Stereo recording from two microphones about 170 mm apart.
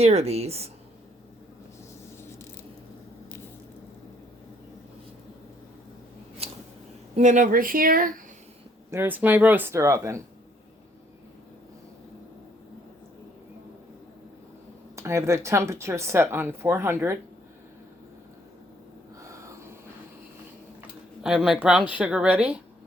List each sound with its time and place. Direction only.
0.0 s speech: 40° right (ahead or behind)
6.4 s a sound: 35° right (ahead or behind)
7.2 s speech: 45° right (ahead or behind)
8.9 s speech: 10° right (ahead or behind)
14.9 s speech: 15° right (ahead or behind)
19.3 s a sound: 20° right (ahead or behind)
21.2 s a woman's voice: 5° right (ahead or behind)